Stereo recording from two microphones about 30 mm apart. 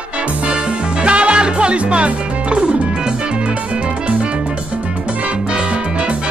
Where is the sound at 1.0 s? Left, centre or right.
Right.